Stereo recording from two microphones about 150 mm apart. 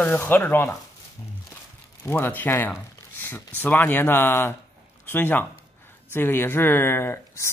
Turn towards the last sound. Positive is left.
turn(degrees=20)  # may be behind; listen again after turning